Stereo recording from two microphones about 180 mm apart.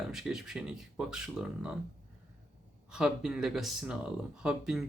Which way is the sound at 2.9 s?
5° right (ahead or behind).